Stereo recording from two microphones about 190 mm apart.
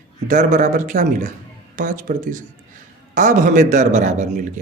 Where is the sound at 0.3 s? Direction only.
40° right (ahead or behind).